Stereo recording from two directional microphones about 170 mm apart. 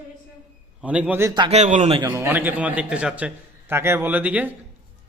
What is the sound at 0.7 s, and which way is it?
Speech, 5° right (ahead or behind).